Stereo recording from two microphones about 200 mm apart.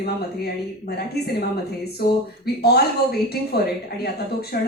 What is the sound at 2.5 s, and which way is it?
Speech, 50° left (ahead or behind).